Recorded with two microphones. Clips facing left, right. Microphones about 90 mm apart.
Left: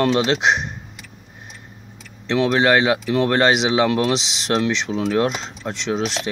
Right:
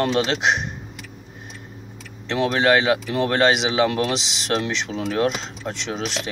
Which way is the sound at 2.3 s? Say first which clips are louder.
Left 2 dB; centre (ahead or behind).